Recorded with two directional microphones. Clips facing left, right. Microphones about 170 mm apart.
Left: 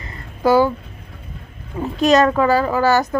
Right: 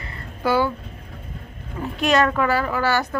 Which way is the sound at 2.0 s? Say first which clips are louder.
Left 5 dB; 40° left (ahead or behind).